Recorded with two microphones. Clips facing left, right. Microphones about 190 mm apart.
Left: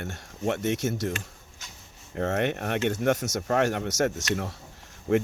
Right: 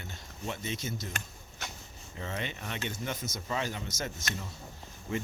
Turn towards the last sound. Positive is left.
turn(degrees=65)  # may be behind; listen again after turning